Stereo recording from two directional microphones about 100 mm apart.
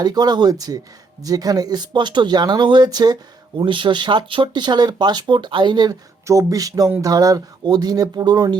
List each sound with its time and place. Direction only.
0.0 s speech: 40° right (ahead or behind)
3.6 s speech: 55° right (ahead or behind)
6.2 s speech: 35° right (ahead or behind)